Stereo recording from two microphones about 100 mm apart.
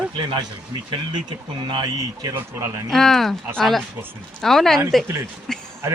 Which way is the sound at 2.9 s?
5° left (ahead or behind).